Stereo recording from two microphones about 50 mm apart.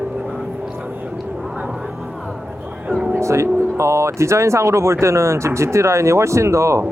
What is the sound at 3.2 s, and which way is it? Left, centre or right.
Speech, right.